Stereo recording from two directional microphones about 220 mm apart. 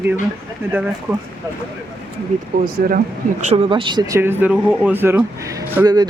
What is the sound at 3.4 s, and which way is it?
Speech, 30° right (ahead or behind).